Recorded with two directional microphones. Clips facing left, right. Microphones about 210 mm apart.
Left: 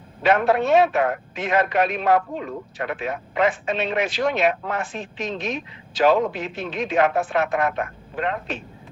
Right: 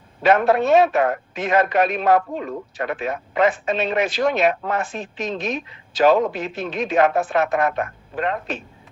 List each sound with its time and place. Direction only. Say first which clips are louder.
0.2 s a man's voice: right 2 dB; 45° right (ahead or behind)